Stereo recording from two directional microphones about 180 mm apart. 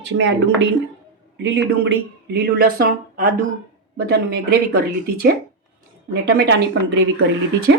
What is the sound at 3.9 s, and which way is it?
Speech, 60° right (ahead or behind).